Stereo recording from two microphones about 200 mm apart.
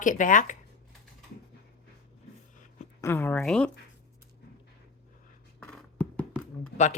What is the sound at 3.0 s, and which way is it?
Speech, 10° left (ahead or behind).